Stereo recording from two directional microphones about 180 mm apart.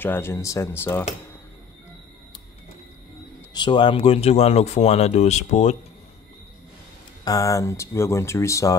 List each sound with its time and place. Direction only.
0.0 s speech: 10° left (ahead or behind)
3.5 s speech: 25° left (ahead or behind)
7.2 s speech: 20° left (ahead or behind)